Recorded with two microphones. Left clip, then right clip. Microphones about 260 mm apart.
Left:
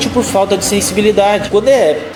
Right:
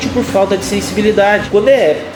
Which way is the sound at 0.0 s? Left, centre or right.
Left.